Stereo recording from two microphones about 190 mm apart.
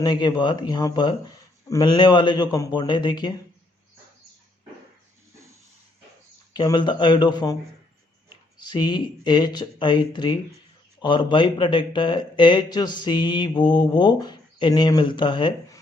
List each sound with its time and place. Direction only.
0.0 s a man's voice: 20° left (ahead or behind)
5.3 s snake: 15° right (ahead or behind)
6.5 s a man's voice: 20° left (ahead or behind)
8.5 s a man's voice: 20° left (ahead or behind)